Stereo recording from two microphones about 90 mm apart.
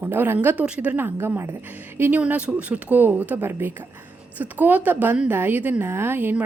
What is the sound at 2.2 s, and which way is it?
A woman's voice, 15° right (ahead or behind).